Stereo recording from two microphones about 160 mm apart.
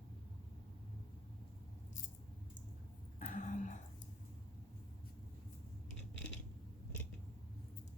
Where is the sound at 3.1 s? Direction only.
50° left (ahead or behind).